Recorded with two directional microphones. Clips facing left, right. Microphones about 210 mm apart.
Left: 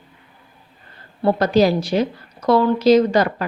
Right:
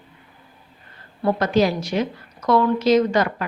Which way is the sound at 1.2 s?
35° left (ahead or behind).